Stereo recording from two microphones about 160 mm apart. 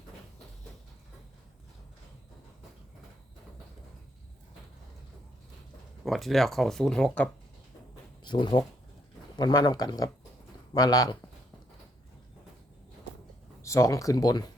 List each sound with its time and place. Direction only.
6.1 s speech: centre (ahead or behind)
8.2 s speech: 25° left (ahead or behind)
13.6 s speech: 20° left (ahead or behind)